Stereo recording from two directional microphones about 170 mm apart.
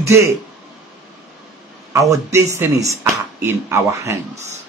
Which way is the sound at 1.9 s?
20° right (ahead or behind).